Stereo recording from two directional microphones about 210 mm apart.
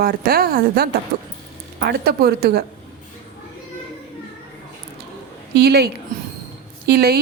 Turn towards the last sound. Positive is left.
turn(degrees=-50)  # may be behind; listen again after turning